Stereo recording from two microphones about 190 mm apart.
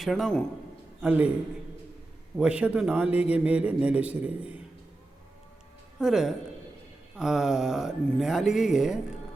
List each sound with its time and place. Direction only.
0.0 s a man's voice: centre (ahead or behind)
2.4 s a man's voice: 5° right (ahead or behind)
6.0 s speech: centre (ahead or behind)